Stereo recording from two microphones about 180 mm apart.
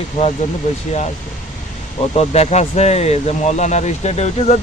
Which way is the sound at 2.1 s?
35° left (ahead or behind).